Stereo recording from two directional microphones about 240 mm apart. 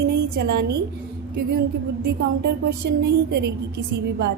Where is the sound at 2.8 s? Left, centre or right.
Right.